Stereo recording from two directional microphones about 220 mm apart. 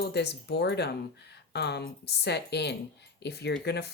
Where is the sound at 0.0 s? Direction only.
50° left (ahead or behind).